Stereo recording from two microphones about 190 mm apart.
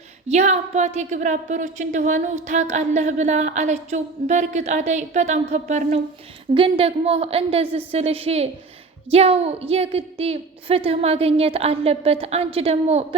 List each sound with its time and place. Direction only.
0.3 s a woman's voice: 35° right (ahead or behind)